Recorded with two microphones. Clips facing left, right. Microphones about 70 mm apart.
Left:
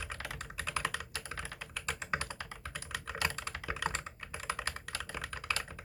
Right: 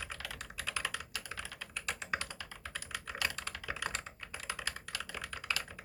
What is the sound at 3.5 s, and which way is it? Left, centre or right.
Computer keyboard, left.